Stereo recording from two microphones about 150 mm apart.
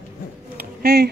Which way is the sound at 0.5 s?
90° right.